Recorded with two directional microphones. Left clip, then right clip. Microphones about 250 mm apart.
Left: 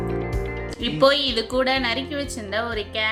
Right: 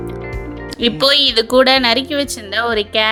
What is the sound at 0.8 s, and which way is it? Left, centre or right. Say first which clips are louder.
A woman's voice: right 6 dB; right.